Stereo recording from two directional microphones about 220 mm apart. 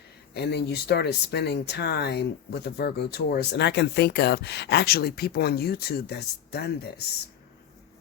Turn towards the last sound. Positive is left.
turn(degrees=45)  # may be behind; listen again after turning